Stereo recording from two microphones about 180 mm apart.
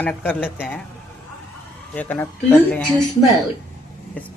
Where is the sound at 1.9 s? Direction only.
10° left (ahead or behind).